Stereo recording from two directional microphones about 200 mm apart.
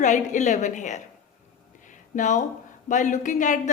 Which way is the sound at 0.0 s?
40° left (ahead or behind).